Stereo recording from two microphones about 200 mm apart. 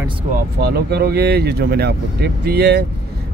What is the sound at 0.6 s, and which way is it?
Speech, 50° right (ahead or behind).